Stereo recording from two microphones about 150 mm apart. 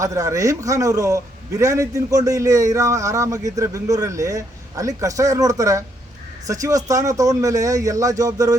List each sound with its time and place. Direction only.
0.0 s a man's voice: 20° right (ahead or behind)